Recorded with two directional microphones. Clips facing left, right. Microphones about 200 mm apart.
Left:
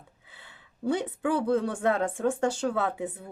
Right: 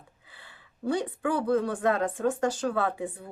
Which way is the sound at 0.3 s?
20° left (ahead or behind).